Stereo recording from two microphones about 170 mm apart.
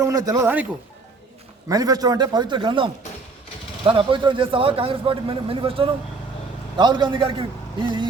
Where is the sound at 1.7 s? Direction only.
20° right (ahead or behind).